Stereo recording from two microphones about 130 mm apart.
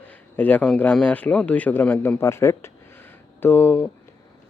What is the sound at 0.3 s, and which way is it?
A man's voice, 10° left (ahead or behind).